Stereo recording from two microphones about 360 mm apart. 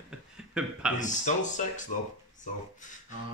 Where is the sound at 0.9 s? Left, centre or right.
Centre.